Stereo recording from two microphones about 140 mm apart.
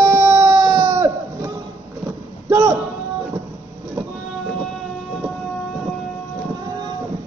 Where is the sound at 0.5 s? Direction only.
30° right (ahead or behind).